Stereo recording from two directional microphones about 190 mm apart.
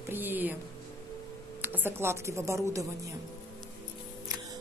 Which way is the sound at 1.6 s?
10° right (ahead or behind).